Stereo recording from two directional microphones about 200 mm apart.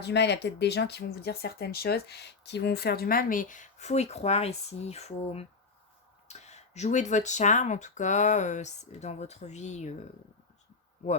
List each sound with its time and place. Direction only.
0.0 s speech: 60° left (ahead or behind); by 9.9 s 35° left (ahead or behind)